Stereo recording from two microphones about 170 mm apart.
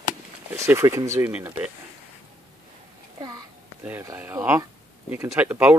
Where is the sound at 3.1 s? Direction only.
20° right (ahead or behind).